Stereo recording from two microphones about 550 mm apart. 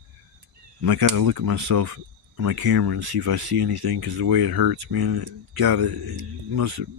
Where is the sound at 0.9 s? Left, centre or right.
Right.